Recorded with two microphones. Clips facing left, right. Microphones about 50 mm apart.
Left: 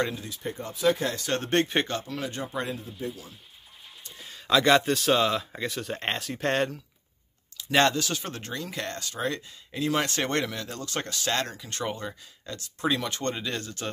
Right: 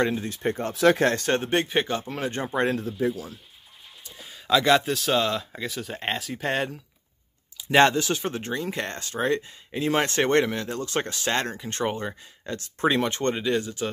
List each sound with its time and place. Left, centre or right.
0.3 s speech: right
1.0 s speech: right
1.4 s speech: centre
2.0 s speech: right
3.0 s speech: right
4.0 s speech: centre
7.7 s speech: right
13.3 s speech: centre